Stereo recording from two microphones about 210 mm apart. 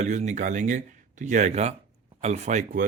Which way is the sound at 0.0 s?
35° right (ahead or behind).